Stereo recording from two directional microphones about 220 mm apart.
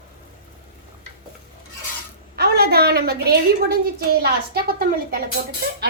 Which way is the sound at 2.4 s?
45° right (ahead or behind).